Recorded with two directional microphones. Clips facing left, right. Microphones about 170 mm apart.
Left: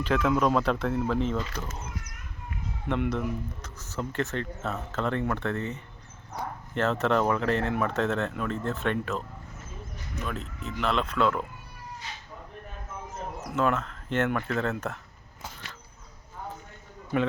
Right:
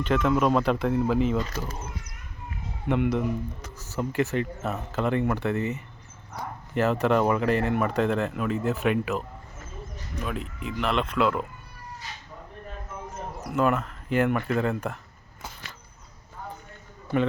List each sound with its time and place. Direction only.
0.0 s speech: centre (ahead or behind)
2.8 s speech: centre (ahead or behind)
10.2 s speech: 10° right (ahead or behind)
13.5 s speech: 5° right (ahead or behind)